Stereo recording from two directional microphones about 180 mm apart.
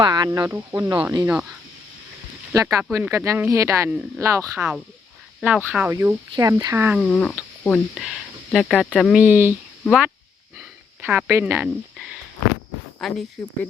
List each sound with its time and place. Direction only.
0.0 s speech: 25° right (ahead or behind)
2.5 s speech: 15° right (ahead or behind)
7.0 s speech: 5° left (ahead or behind)
9.2 s speech: 10° right (ahead or behind)
13.0 s speech: centre (ahead or behind)